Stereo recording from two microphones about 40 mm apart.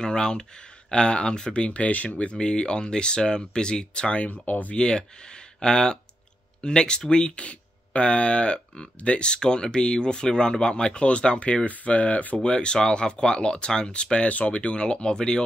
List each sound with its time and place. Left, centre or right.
0.0 s speech: centre; by 4.4 s left
4.5 s speech: left
4.7 s speech: left
12.4 s speech: left
14.2 s speech: left